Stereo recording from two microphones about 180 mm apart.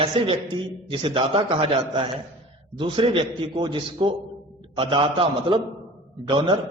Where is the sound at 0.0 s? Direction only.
30° right (ahead or behind).